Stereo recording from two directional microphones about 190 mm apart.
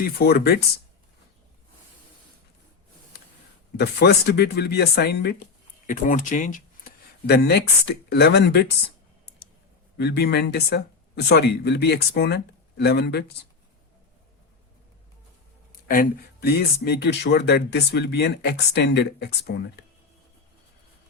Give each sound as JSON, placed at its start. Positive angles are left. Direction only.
{"t": 0.0, "sound": "speech", "side_deg": 55}
{"t": 3.8, "sound": "speech", "side_deg": 60}
{"t": 5.8, "sound": "speech", "side_deg": 45}
{"t": 10.0, "sound": "speech", "side_deg": 60}
{"t": 15.9, "sound": "speech", "side_deg": 50}